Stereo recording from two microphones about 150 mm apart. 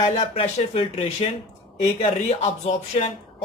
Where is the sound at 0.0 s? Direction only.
40° left (ahead or behind).